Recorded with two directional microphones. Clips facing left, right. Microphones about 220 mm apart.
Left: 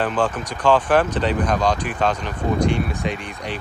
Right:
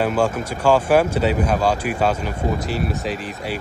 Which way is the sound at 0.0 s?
10° right (ahead or behind).